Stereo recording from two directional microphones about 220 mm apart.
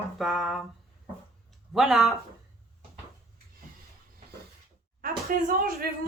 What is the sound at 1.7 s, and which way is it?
Speech, centre (ahead or behind).